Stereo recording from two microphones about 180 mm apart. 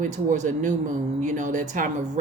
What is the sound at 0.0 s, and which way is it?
Speech, 45° right (ahead or behind).